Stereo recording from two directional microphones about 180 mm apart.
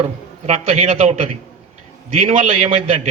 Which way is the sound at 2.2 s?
45° right (ahead or behind).